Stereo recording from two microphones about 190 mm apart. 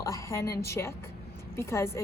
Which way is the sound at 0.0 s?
15° left (ahead or behind).